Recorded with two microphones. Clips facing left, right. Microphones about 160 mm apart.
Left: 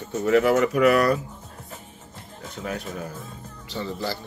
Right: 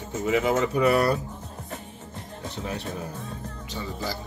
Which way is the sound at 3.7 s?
15° right (ahead or behind).